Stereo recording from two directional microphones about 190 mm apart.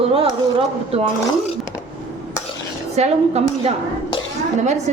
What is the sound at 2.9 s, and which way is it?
A woman's voice, 35° right (ahead or behind).